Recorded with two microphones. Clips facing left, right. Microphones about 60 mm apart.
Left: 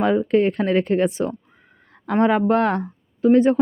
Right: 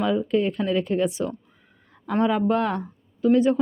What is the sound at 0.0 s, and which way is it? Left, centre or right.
Speech, left.